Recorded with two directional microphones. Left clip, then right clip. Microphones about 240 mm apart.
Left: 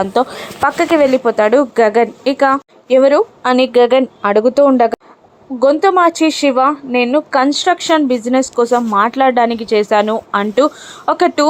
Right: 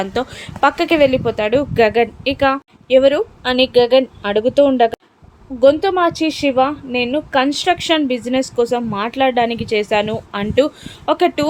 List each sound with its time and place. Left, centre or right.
0.0 s speech: centre
6.1 s speech: left
6.4 s speech: centre